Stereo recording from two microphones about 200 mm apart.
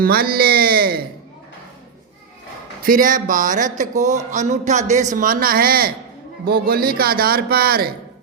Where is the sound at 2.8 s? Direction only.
45° right (ahead or behind).